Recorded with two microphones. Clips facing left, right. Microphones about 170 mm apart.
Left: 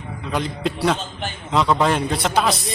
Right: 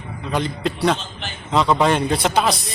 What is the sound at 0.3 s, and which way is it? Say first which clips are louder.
A man's voice: right 1 dB; centre (ahead or behind).